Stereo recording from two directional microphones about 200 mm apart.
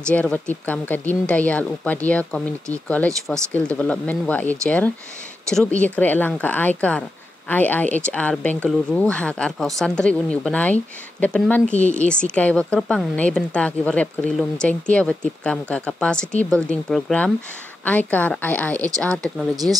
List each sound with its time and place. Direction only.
0.1 s a woman's voice: 10° left (ahead or behind)
3.5 s a woman's voice: 5° left (ahead or behind)
19.5 s speech: 20° right (ahead or behind)